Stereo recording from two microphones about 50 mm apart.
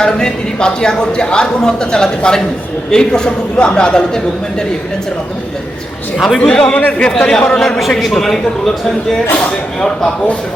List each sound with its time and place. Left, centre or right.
0.0 s speech: centre
6.1 s a man's voice: centre
6.5 s speech: centre
7.8 s a man's voice: centre